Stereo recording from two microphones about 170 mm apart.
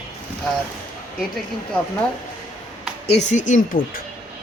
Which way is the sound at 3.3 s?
45° left (ahead or behind).